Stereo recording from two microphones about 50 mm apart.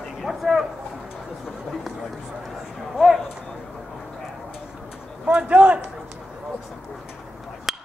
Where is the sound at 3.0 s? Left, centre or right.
Centre.